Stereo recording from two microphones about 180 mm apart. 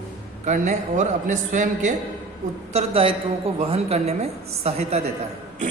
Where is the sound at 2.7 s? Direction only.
35° right (ahead or behind).